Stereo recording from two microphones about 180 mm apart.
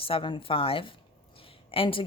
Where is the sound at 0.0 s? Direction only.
30° left (ahead or behind).